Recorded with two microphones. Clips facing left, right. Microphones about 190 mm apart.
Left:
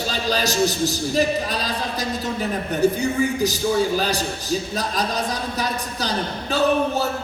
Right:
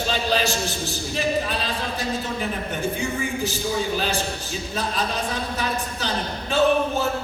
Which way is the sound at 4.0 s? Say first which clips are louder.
Left 2 dB; 40° left (ahead or behind).